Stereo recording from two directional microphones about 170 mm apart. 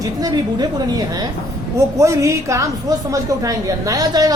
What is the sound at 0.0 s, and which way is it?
A woman's voice, 20° right (ahead or behind).